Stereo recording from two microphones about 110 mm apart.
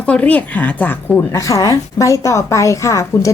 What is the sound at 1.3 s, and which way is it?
A woman's voice, 30° left (ahead or behind).